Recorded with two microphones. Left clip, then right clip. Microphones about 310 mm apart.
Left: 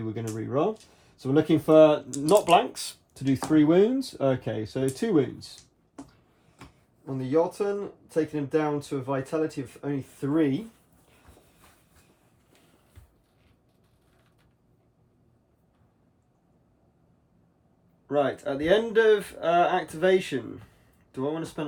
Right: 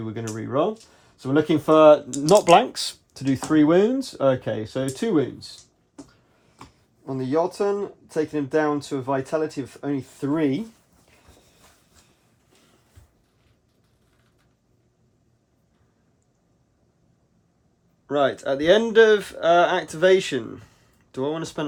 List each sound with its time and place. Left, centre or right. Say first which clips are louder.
0.0 s speech: right 2 dB; centre
2.3 s speech: right 5 dB; right; by 5.5 s centre
7.0 s speech: right 2 dB; right
18.1 s speech: right 4 dB; centre